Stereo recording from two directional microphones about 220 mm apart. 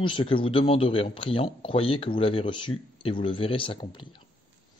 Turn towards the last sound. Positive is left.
turn(degrees=25)  # may be behind; listen again after turning